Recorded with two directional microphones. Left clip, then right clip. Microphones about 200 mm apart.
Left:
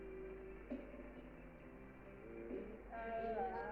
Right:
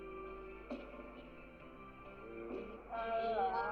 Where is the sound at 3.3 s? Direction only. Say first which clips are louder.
Right 7 dB; 25° right (ahead or behind).